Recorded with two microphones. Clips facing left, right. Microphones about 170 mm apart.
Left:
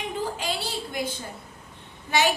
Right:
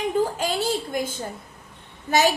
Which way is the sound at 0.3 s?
45° right (ahead or behind).